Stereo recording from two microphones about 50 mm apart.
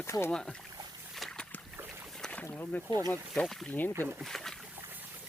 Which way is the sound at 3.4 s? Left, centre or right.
Left.